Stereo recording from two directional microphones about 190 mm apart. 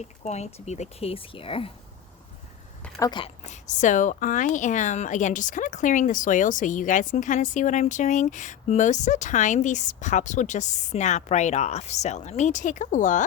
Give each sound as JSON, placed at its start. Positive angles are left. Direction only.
{"t": 0.0, "sound": "a woman's voice", "side_deg": 35}
{"t": 3.0, "sound": "a woman's voice", "side_deg": 25}